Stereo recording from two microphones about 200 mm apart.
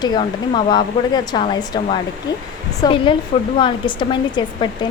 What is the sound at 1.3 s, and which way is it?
A woman's voice, 20° left (ahead or behind).